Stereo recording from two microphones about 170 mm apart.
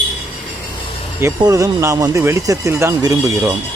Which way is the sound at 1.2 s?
20° right (ahead or behind).